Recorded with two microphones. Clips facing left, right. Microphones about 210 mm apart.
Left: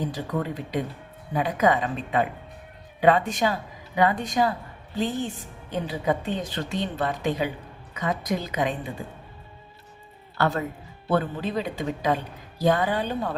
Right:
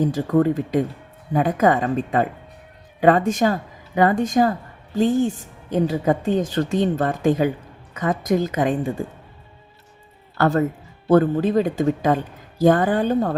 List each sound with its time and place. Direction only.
0.0 s speech: 45° right (ahead or behind)
10.3 s speech: 45° right (ahead or behind)